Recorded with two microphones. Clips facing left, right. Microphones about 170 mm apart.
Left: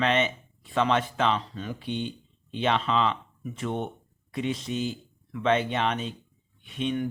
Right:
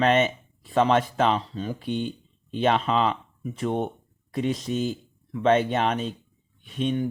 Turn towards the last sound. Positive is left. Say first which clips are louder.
# right 3 dB
turn(degrees=-40)  # may be behind; listen again after turning